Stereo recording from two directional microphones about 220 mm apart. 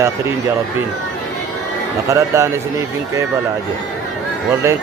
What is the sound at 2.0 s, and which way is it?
Speech, 15° right (ahead or behind).